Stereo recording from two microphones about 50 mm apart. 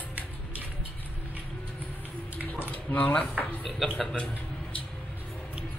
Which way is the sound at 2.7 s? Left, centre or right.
Left.